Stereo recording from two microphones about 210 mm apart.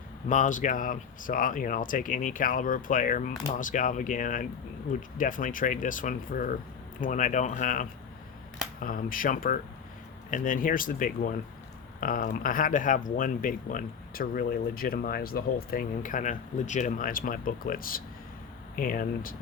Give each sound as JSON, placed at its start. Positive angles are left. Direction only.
{"t": 0.3, "sound": "speech", "side_deg": 35}